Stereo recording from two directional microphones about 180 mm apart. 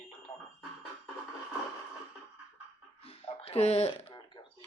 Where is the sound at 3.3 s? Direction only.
35° left (ahead or behind).